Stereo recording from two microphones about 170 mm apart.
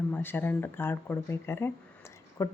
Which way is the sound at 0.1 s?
10° left (ahead or behind).